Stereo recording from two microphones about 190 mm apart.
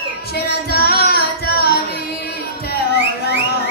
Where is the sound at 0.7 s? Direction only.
55° left (ahead or behind).